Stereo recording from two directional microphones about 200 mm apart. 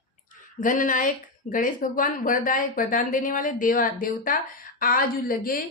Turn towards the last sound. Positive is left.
turn(degrees=45)  # may be behind; listen again after turning